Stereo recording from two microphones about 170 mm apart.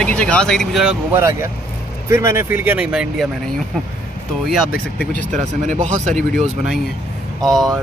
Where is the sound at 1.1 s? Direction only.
15° right (ahead or behind).